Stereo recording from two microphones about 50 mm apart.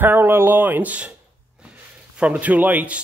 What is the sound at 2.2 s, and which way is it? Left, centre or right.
Speech, right.